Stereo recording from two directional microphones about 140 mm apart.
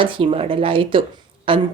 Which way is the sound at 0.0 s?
40° right (ahead or behind).